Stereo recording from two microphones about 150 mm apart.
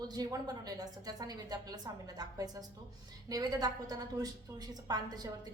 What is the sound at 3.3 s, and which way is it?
A woman's voice, 25° right (ahead or behind).